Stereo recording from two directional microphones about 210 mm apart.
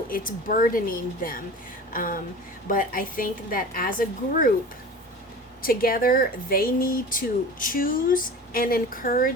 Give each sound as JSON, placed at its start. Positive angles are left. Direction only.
{"t": 0.1, "sound": "a woman's voice", "side_deg": 40}
{"t": 5.6, "sound": "speech", "side_deg": 45}